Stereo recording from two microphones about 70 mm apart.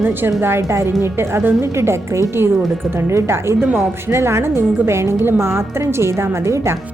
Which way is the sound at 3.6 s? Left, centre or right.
Right.